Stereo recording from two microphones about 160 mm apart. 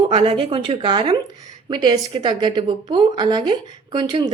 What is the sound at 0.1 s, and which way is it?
A woman's voice, 35° right (ahead or behind).